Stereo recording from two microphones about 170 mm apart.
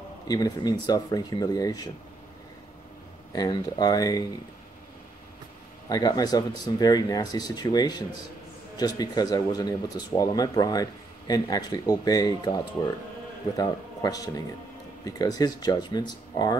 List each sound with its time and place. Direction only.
0.3 s speech: 20° left (ahead or behind)
3.3 s speech: 25° left (ahead or behind)
5.9 s a man's voice: 20° left (ahead or behind)